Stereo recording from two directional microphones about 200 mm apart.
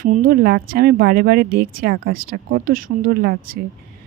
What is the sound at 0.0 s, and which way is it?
Speech, 45° right (ahead or behind).